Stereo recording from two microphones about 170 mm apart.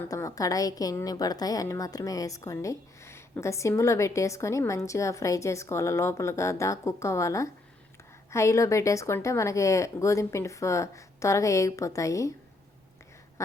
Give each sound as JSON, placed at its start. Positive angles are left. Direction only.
{"t": 0.1, "sound": "a woman's voice", "side_deg": 20}